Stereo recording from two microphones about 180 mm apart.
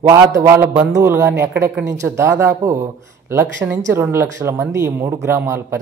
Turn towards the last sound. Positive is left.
turn(degrees=-15)  # may be behind; listen again after turning